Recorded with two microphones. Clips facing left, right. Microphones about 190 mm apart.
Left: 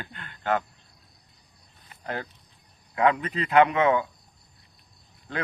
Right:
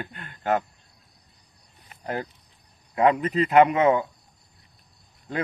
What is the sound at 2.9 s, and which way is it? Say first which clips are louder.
A man's voice: right 3 dB; 35° right (ahead or behind).